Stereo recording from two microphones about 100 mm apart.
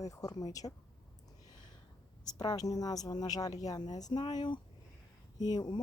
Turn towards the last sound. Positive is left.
turn(degrees=45)  # may be behind; listen again after turning